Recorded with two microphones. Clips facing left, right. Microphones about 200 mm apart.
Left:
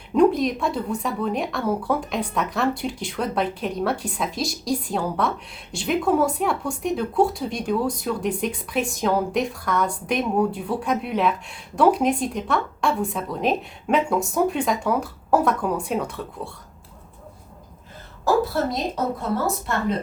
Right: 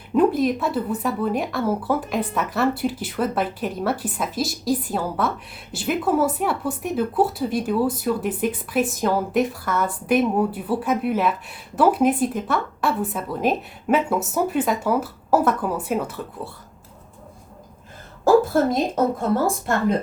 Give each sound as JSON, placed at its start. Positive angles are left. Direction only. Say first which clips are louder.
{"t": 0.1, "sound": "a woman's voice", "louder": "even", "side_deg": -5}
{"t": 18.5, "sound": "a woman's voice", "louder": "right 5 dB", "side_deg": -50}